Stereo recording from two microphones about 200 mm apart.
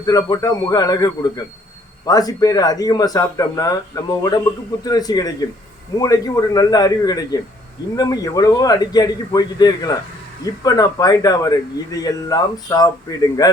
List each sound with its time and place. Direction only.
0.0 s a man's voice: 20° left (ahead or behind)